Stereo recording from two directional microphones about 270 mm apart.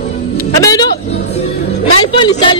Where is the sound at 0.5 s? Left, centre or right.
Centre.